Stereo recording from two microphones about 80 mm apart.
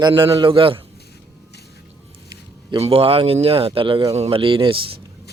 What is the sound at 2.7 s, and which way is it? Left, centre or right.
A man's voice, right.